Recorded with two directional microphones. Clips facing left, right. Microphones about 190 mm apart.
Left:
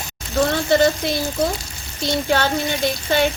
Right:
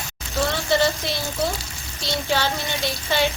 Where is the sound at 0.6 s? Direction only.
50° left (ahead or behind).